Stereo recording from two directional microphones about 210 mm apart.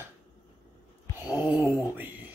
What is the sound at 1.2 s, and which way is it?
Speech, 10° right (ahead or behind).